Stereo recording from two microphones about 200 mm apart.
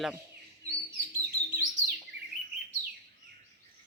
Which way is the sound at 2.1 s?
65° right (ahead or behind).